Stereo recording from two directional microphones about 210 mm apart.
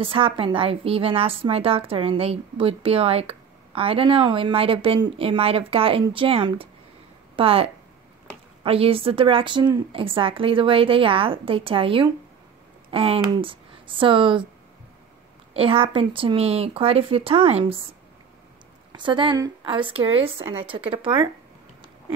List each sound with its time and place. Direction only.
0.0 s a woman's voice: 25° right (ahead or behind)
15.5 s a woman's voice: 25° right (ahead or behind)
18.9 s a woman's voice: 20° right (ahead or behind)